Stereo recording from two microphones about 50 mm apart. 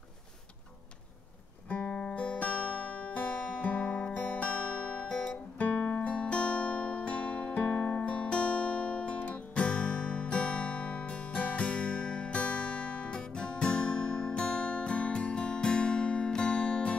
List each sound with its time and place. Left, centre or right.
1.7 s music: left